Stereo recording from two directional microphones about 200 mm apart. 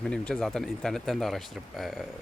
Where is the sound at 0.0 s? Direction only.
5° left (ahead or behind).